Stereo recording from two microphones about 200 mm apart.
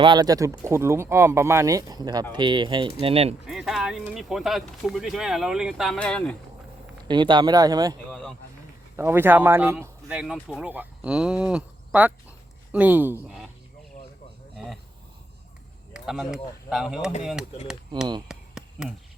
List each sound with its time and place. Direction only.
0.0 s speech: 20° right (ahead or behind)
3.4 s speech: centre (ahead or behind)
7.1 s speech: 25° right (ahead or behind)
8.1 s a sound: centre (ahead or behind)
9.0 s speech: 10° right (ahead or behind)
14.5 s insect: centre (ahead or behind)
15.9 s speech: centre (ahead or behind)
18.3 s a sound: 5° right (ahead or behind)